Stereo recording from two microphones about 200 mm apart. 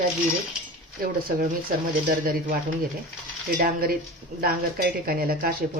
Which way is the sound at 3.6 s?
50° right (ahead or behind).